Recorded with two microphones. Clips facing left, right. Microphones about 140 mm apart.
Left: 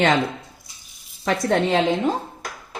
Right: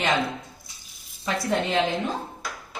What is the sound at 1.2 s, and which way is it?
Speech, 90° left.